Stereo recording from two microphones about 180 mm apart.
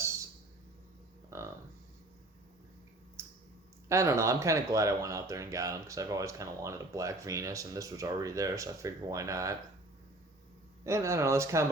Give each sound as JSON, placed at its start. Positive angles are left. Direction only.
{"t": 3.2, "sound": "a sound", "side_deg": -15}
{"t": 3.8, "sound": "speech", "side_deg": -15}
{"t": 10.8, "sound": "speech", "side_deg": -15}